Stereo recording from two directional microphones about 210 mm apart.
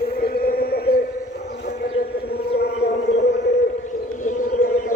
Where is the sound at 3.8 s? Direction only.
35° left (ahead or behind).